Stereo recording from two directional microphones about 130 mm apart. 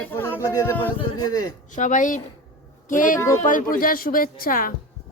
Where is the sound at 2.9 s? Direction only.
90° left.